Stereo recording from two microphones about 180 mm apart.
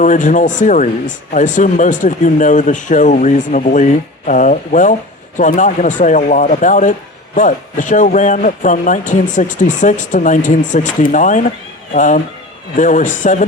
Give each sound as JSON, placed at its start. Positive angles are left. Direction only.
{"t": 0.0, "sound": "speech", "side_deg": 45}